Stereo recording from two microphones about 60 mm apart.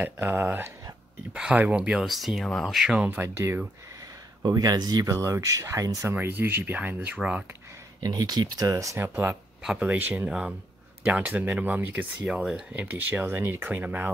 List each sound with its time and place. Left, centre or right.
0.0 s speech: right
1.3 s speech: centre
2.0 s speech: centre
3.2 s speech: right
4.4 s speech: right
6.1 s speech: right
8.0 s speech: right
8.9 s speech: right
9.8 s speech: right
12.3 s speech: centre
12.7 s speech: right